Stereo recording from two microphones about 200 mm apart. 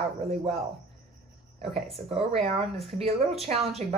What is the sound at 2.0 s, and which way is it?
A woman's voice, 30° right (ahead or behind).